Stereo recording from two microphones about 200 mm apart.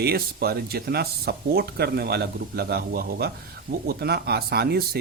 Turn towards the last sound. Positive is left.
turn(degrees=-50)  # may be behind; listen again after turning